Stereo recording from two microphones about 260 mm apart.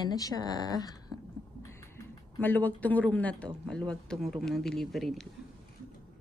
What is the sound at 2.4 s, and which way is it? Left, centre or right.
Speech, centre.